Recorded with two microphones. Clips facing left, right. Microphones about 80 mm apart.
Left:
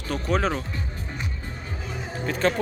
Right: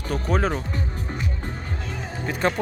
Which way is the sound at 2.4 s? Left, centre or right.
Centre.